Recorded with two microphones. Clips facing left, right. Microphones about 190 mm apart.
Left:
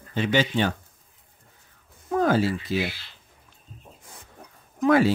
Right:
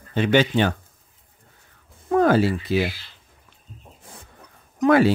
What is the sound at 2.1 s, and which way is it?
Speech, 65° right (ahead or behind).